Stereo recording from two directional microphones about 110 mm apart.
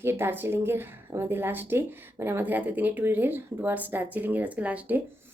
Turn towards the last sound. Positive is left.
turn(degrees=-15)  # may be behind; listen again after turning